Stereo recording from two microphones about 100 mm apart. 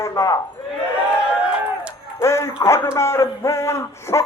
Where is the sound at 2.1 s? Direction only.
30° left (ahead or behind).